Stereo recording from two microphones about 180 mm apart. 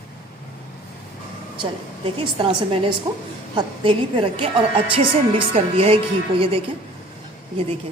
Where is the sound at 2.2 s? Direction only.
30° right (ahead or behind).